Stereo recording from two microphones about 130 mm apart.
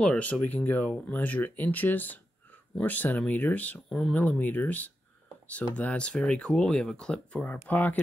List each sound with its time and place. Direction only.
0.0 s speech: 10° left (ahead or behind)